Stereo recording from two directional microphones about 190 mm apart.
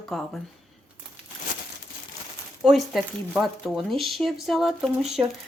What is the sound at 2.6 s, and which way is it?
Speech, centre (ahead or behind).